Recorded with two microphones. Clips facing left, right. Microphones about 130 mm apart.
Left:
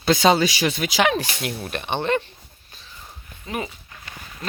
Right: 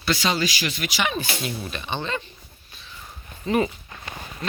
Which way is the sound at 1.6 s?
60° left (ahead or behind).